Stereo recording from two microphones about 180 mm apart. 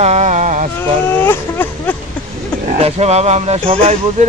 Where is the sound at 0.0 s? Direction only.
40° right (ahead or behind).